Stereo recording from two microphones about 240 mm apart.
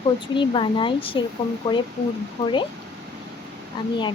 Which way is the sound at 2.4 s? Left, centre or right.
Centre.